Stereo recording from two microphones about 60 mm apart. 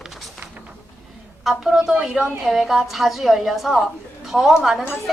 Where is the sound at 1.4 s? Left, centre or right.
Centre.